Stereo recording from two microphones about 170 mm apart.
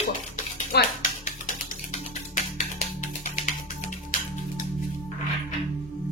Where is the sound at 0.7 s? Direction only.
50° left (ahead or behind).